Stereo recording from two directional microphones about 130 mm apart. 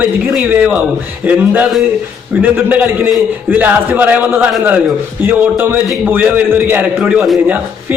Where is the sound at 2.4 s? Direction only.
15° right (ahead or behind).